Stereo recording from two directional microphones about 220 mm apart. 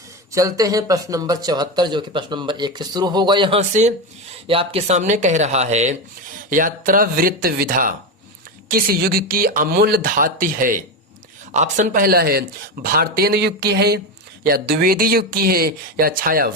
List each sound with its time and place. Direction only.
0.3 s speech: 15° right (ahead or behind); by 16.5 s 40° right (ahead or behind)